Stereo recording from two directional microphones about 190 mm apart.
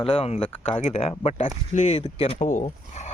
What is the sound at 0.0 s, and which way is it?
Speech, 30° left (ahead or behind).